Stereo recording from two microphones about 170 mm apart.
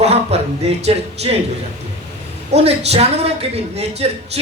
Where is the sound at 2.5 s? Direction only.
35° right (ahead or behind).